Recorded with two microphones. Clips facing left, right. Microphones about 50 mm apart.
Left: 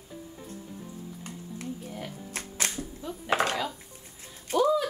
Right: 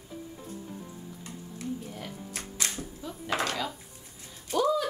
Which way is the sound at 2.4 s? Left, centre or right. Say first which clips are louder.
Left 4 dB; left.